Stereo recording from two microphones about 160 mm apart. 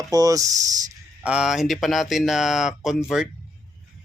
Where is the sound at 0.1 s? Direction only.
20° right (ahead or behind).